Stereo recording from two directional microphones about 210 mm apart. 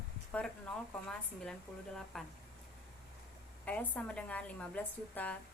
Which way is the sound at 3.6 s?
5° left (ahead or behind).